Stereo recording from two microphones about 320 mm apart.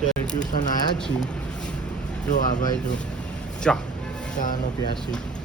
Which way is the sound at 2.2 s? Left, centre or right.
Left.